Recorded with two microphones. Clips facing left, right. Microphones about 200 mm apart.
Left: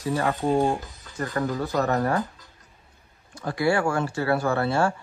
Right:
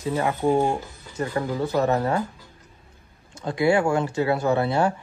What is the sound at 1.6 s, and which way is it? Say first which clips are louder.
Speech: right 4 dB; 25° right (ahead or behind).